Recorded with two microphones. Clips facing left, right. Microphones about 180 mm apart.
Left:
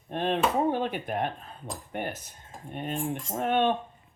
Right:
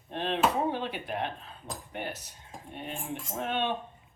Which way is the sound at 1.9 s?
50° left (ahead or behind).